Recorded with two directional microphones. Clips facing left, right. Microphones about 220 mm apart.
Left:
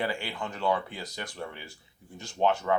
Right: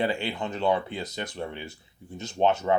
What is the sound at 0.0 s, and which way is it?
Speech, 25° right (ahead or behind).